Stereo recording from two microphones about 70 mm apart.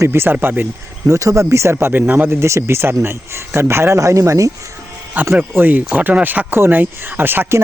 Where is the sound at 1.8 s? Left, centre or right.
Right.